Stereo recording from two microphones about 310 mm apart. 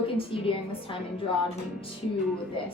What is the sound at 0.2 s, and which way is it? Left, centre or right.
Speech, centre.